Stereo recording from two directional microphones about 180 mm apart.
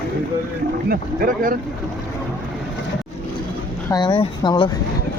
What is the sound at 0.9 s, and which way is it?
Speech, 55° right (ahead or behind).